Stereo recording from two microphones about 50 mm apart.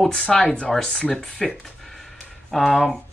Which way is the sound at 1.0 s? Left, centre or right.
Left.